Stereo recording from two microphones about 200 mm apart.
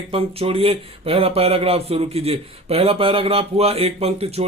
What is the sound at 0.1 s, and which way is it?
Speech, 30° right (ahead or behind).